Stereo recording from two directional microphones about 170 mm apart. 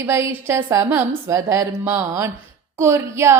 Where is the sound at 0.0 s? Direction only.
15° right (ahead or behind).